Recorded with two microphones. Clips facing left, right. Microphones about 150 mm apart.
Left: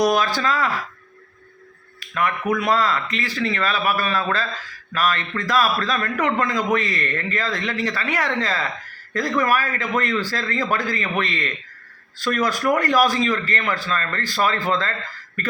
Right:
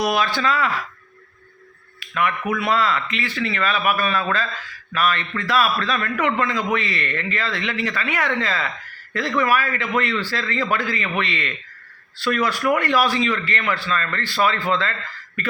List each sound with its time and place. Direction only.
0.0 s a man's voice: 40° left (ahead or behind)
2.0 s a man's voice: 40° left (ahead or behind)